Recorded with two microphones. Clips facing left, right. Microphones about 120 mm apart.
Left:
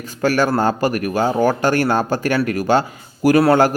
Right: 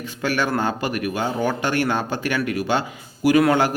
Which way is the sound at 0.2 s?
40° left (ahead or behind).